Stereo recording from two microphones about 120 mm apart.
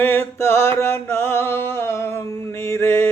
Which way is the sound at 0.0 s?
20° left (ahead or behind).